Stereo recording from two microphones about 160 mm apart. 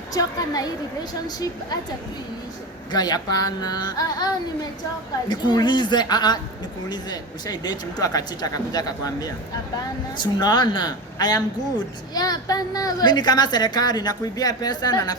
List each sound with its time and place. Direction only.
0.1 s a woman's voice: 25° left (ahead or behind)
1.7 s a woman's voice: 25° left (ahead or behind)
2.9 s a woman's voice: 25° left (ahead or behind)